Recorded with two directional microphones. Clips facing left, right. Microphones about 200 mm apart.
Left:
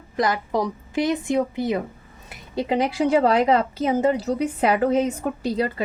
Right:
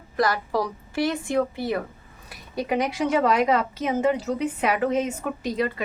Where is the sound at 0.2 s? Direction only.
20° left (ahead or behind).